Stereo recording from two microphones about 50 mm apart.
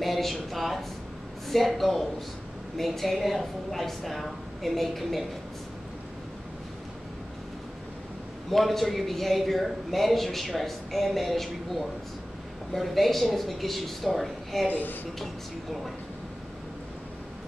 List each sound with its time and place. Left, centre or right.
0.0 s a man's voice: centre
8.5 s a man's voice: centre
14.7 s speech: left